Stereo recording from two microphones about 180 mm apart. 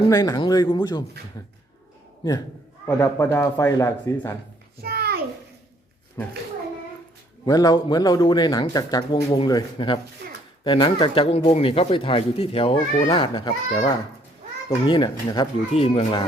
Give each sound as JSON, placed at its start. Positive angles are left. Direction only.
{"t": 0.1, "sound": "speech", "side_deg": 20}
{"t": 2.8, "sound": "speech", "side_deg": 15}
{"t": 4.8, "sound": "a sound", "side_deg": -60}
{"t": 6.2, "sound": "speech", "side_deg": 15}
{"t": 7.4, "sound": "speech", "side_deg": 20}
{"t": 15.7, "sound": "speech", "side_deg": 35}